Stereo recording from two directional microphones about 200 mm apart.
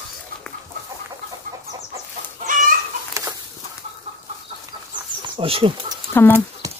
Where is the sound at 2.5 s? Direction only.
40° right (ahead or behind).